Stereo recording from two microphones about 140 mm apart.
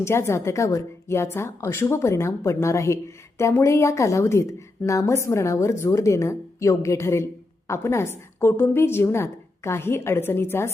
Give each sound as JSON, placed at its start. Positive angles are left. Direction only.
{"t": 0.0, "sound": "a woman's voice", "side_deg": 20}